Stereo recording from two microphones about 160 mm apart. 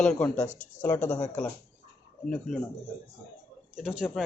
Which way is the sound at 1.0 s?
45° left (ahead or behind).